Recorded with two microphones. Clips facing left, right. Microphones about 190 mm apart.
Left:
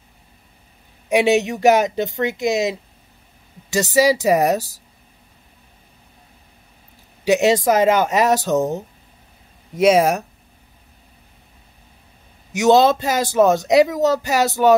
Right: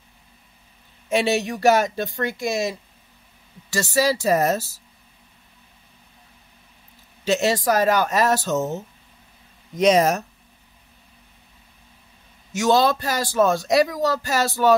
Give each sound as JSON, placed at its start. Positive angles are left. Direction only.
{"t": 1.0, "sound": "speech", "side_deg": 15}
{"t": 7.2, "sound": "speech", "side_deg": 15}
{"t": 12.5, "sound": "speech", "side_deg": 20}